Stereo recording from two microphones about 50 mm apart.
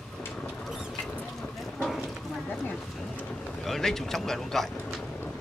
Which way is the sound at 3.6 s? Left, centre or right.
Centre.